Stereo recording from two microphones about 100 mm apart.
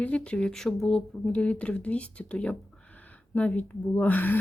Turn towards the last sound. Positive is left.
turn(degrees=15)  # may be behind; listen again after turning